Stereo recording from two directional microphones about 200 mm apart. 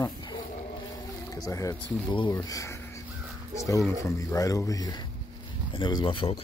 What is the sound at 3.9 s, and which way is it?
Speech, 15° left (ahead or behind).